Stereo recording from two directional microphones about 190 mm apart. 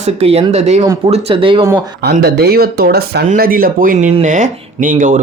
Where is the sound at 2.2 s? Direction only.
55° right (ahead or behind).